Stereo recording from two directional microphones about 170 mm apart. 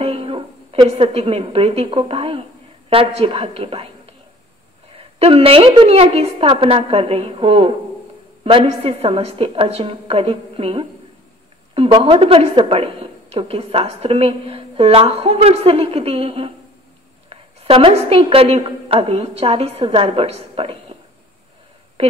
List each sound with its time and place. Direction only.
0.0 s a woman's voice: 35° right (ahead or behind)